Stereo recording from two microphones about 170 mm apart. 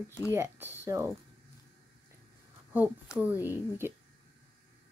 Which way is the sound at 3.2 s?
10° right (ahead or behind).